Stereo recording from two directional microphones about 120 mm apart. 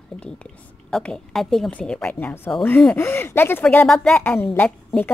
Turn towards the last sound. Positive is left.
turn(degrees=15)  # may be behind; listen again after turning